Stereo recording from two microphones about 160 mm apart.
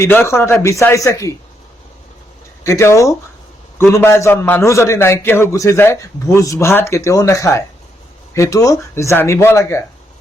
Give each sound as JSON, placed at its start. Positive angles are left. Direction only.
{"t": 0.0, "sound": "a man's voice", "side_deg": 15}
{"t": 2.6, "sound": "a man's voice", "side_deg": 20}